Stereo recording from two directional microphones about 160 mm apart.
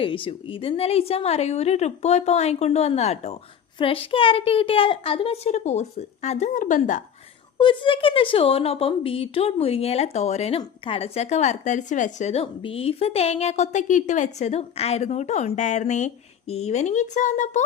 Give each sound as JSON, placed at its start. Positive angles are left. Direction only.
{"t": 0.0, "sound": "a woman's voice", "side_deg": 35}
{"t": 7.6, "sound": "a woman's voice", "side_deg": 30}